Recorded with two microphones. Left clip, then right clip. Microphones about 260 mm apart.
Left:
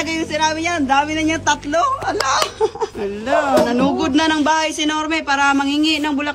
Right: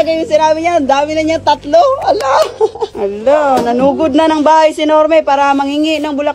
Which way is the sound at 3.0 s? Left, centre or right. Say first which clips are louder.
Right 8 dB; centre.